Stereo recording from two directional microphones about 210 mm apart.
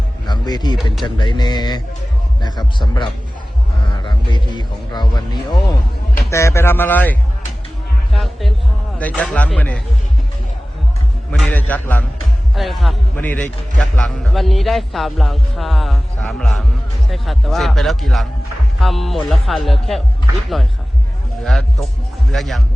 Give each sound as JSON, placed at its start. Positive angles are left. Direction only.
{"t": 0.3, "sound": "speech", "side_deg": 20}
{"t": 4.0, "sound": "a sound", "side_deg": 20}
{"t": 4.5, "sound": "speech", "side_deg": 20}
{"t": 8.2, "sound": "music", "side_deg": 0}
{"t": 9.0, "sound": "speech", "side_deg": 5}
{"t": 11.3, "sound": "a man's voice", "side_deg": 5}
{"t": 21.4, "sound": "a man's voice", "side_deg": 0}